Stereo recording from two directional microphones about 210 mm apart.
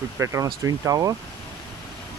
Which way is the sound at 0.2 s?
15° right (ahead or behind).